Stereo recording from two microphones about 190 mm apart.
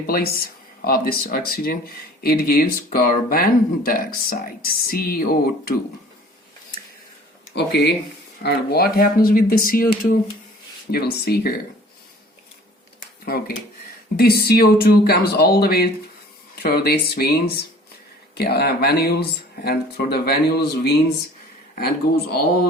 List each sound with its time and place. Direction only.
0.1 s speech: 50° left (ahead or behind)
7.5 s speech: 60° left (ahead or behind)
14.2 s speech: 55° left (ahead or behind)